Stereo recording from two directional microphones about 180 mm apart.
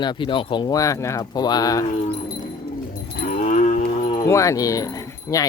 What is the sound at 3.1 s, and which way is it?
Cattle, 45° left (ahead or behind).